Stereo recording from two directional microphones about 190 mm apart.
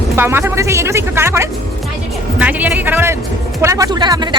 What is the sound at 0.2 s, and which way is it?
A man's voice, 10° right (ahead or behind).